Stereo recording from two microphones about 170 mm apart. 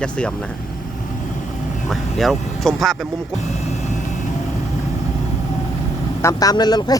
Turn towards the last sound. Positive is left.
turn(degrees=25)  # may be behind; listen again after turning